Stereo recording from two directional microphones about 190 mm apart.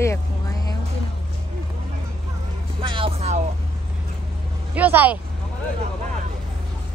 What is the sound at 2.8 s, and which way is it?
Music, 25° right (ahead or behind).